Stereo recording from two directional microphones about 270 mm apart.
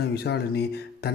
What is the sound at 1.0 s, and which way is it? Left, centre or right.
Music, left.